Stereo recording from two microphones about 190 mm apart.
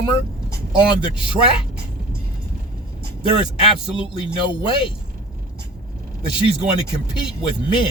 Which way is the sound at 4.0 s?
25° left (ahead or behind).